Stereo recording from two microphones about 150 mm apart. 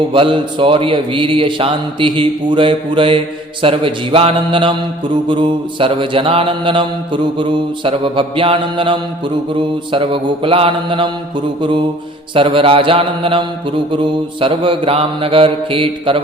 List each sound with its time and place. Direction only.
0.1 s mantra: 35° right (ahead or behind)
12.3 s mantra: 35° right (ahead or behind)